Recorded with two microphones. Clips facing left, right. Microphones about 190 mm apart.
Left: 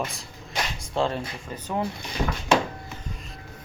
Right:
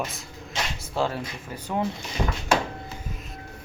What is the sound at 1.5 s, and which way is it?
Speech, 10° right (ahead or behind).